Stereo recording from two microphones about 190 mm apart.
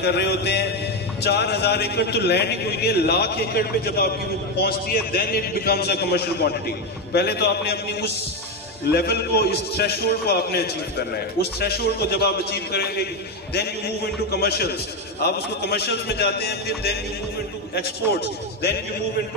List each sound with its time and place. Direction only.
0.0 s a man's voice: 60° left (ahead or behind)